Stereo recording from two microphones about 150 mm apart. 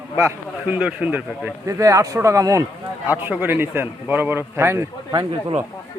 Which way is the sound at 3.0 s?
10° right (ahead or behind).